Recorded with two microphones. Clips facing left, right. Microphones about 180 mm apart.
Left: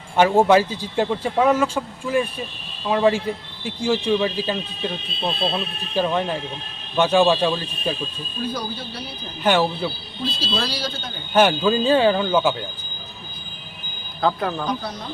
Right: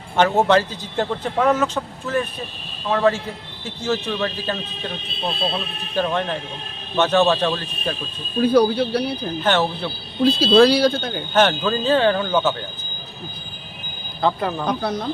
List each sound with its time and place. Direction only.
0.2 s speech: 10° left (ahead or behind)
8.4 s speech: 70° right (ahead or behind)
9.4 s speech: 10° left (ahead or behind)
10.2 s speech: 60° right (ahead or behind)
11.3 s speech: 10° left (ahead or behind)
14.2 s speech: centre (ahead or behind)
14.7 s speech: 60° right (ahead or behind)